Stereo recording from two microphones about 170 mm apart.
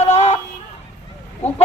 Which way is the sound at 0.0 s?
40° left (ahead or behind).